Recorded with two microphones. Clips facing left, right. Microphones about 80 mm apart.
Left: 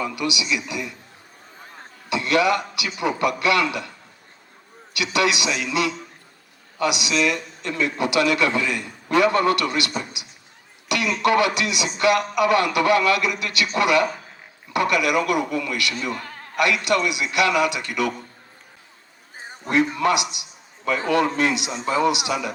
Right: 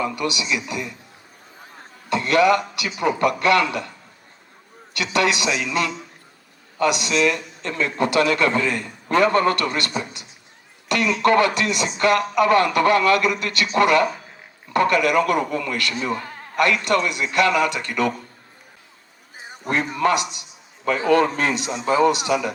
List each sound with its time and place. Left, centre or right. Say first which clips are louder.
0.0 s a man's voice: right 1 dB; right
2.0 s a man's voice: right 3 dB; right
4.9 s a man's voice: right 1 dB; right
10.8 s a sound: right 2 dB; right
11.2 s a man's voice: right 2 dB; right
19.6 s a man's voice: left 1 dB; right